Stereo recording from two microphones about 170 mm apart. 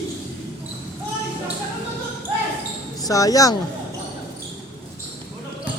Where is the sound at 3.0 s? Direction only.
20° left (ahead or behind).